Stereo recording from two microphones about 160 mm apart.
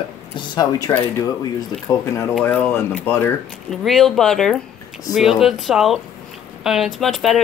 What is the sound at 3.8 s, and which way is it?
Speech, centre (ahead or behind).